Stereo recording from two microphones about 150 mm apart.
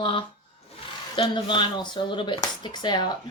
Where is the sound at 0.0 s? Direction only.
35° left (ahead or behind).